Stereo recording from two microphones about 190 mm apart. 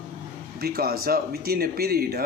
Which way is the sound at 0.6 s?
55° right (ahead or behind).